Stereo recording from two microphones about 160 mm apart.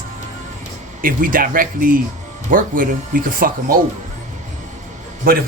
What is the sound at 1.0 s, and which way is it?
Speech, 60° right (ahead or behind).